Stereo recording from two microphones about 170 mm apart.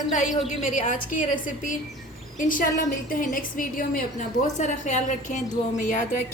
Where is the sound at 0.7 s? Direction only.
50° left (ahead or behind).